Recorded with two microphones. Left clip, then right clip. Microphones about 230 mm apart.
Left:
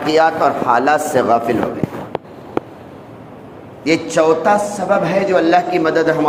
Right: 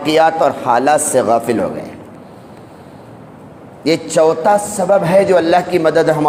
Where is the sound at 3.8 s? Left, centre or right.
Right.